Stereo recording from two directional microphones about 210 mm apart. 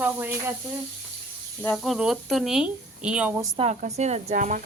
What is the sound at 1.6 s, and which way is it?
A woman's voice, centre (ahead or behind).